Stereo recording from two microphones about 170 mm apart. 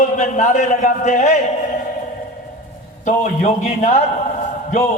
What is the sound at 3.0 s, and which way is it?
A man's voice, 45° left (ahead or behind).